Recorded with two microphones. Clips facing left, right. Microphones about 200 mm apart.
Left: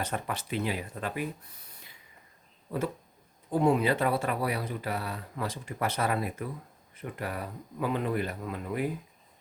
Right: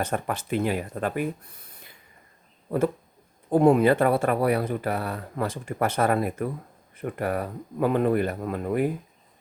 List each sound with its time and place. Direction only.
0.0 s speech: 50° right (ahead or behind)
2.6 s a sound: 55° right (ahead or behind)
3.5 s speech: 50° right (ahead or behind)